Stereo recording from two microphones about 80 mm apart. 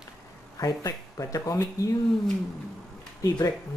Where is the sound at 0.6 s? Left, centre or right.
Left.